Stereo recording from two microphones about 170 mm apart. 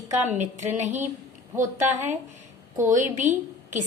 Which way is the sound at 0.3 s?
45° right (ahead or behind).